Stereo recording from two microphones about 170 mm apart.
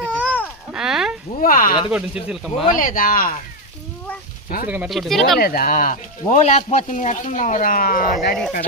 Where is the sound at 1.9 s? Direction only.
5° right (ahead or behind).